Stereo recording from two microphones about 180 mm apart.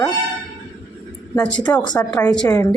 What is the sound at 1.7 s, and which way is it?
Speech, 20° left (ahead or behind).